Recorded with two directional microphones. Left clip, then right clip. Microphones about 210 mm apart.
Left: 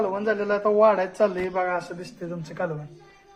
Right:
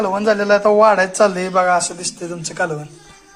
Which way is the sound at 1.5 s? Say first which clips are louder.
Right 11 dB; 20° right (ahead or behind).